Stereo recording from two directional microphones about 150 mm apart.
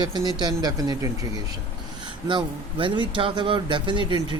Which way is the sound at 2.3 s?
35° right (ahead or behind).